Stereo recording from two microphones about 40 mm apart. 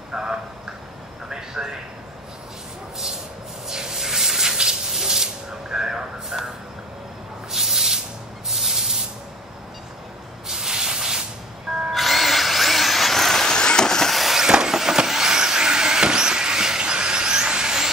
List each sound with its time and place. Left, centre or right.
0.1 s a sound: right
3.6 s spray: centre
6.3 s vehicle: centre
7.5 s a sound: centre
8.5 s spray: centre
10.5 s spray: centre
11.9 s vehicle: centre
13.5 s vehicle: centre
14.1 s vehicle: centre